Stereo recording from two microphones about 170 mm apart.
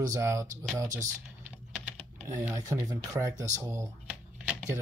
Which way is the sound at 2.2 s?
15° right (ahead or behind).